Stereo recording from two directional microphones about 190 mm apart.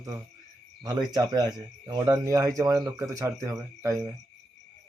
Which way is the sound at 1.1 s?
20° right (ahead or behind).